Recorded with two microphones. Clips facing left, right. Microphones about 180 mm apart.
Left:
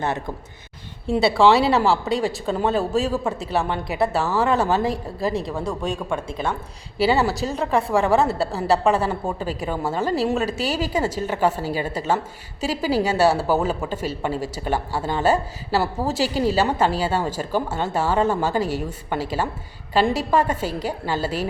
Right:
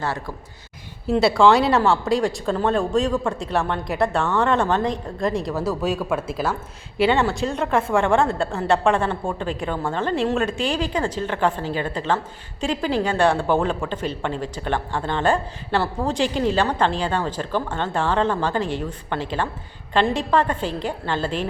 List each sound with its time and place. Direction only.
0.0 s speech: 20° left (ahead or behind)
1.0 s a woman's voice: centre (ahead or behind)